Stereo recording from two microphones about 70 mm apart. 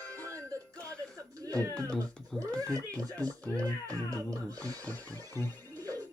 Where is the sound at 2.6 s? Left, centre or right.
Right.